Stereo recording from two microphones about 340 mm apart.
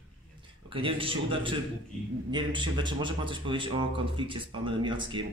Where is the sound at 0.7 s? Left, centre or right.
Centre.